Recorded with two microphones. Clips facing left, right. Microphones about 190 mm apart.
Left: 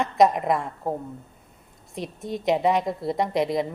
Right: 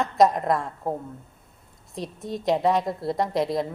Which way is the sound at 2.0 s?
Centre (ahead or behind).